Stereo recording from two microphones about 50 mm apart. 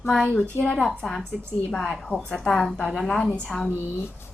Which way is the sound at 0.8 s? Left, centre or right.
Centre.